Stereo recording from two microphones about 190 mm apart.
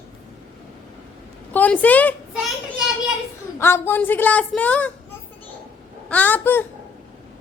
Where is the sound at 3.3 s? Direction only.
15° left (ahead or behind).